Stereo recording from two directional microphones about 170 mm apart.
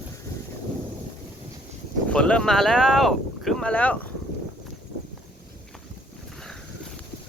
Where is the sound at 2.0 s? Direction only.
5° left (ahead or behind).